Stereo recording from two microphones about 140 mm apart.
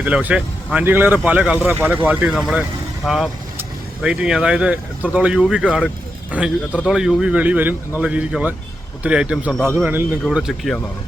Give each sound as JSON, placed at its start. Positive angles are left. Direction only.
{"t": 0.0, "sound": "a man's voice", "side_deg": -10}
{"t": 9.6, "sound": "a man's voice", "side_deg": -15}
{"t": 10.2, "sound": "speech", "side_deg": -5}